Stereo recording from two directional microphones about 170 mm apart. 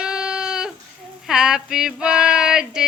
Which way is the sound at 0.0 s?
5° right (ahead or behind).